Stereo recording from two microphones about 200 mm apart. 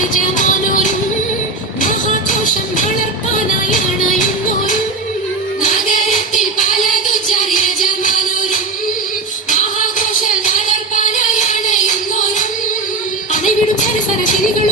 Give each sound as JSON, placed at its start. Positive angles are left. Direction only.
{"t": 0.1, "sound": "music", "side_deg": 40}
{"t": 5.6, "sound": "music", "side_deg": 40}